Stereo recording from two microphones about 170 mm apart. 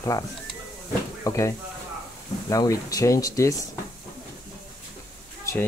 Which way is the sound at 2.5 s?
20° left (ahead or behind).